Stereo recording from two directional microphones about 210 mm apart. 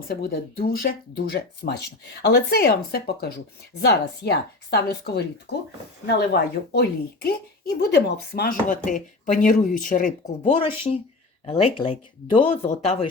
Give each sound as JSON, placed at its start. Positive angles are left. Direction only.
{"t": 0.1, "sound": "a woman's voice", "side_deg": 45}